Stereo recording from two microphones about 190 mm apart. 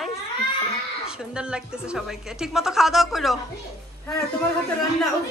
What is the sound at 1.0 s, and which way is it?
A woman's voice, 5° right (ahead or behind).